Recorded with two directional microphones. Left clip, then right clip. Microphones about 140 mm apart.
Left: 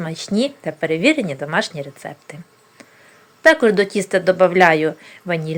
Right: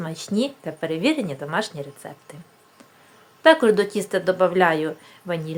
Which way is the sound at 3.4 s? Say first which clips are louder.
Left 3 dB; 15° left (ahead or behind).